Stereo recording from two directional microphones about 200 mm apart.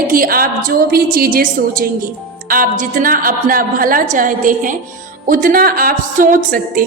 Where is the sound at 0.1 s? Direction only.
45° right (ahead or behind).